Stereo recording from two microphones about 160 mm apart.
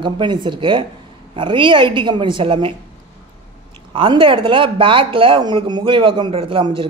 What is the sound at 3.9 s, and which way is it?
Speech, 30° right (ahead or behind).